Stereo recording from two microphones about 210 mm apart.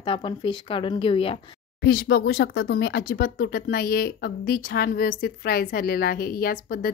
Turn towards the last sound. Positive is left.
turn(degrees=45)  # may be behind; listen again after turning